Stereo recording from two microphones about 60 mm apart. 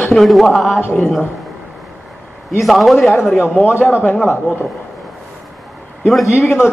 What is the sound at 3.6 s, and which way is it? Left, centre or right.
Speech, left.